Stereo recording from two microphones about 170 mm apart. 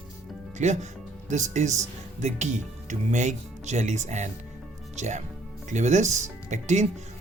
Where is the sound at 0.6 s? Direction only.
45° right (ahead or behind).